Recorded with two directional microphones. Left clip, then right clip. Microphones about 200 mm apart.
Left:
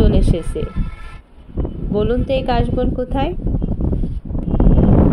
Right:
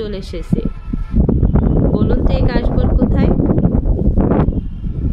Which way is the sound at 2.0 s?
10° left (ahead or behind).